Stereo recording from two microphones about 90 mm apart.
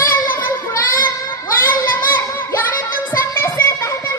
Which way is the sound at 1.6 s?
25° left (ahead or behind).